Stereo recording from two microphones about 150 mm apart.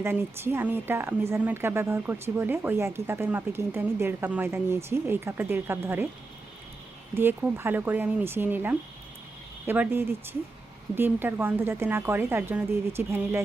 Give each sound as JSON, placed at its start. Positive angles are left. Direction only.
{"t": 0.0, "sound": "speech", "side_deg": -15}
{"t": 7.1, "sound": "speech", "side_deg": -15}